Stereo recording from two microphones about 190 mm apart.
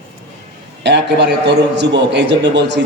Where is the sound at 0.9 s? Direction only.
65° right (ahead or behind).